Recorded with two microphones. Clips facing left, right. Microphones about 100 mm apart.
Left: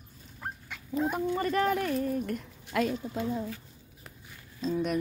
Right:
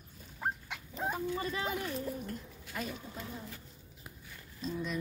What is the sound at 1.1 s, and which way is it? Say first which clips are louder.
Speech: left 6 dB; 60° left (ahead or behind).